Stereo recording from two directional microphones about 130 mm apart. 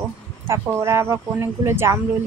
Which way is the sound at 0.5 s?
20° right (ahead or behind).